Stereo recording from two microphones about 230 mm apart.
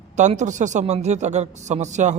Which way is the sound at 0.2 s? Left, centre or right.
Right.